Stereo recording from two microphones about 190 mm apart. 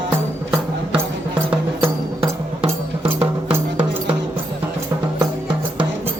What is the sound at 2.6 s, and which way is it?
Music, 30° right (ahead or behind).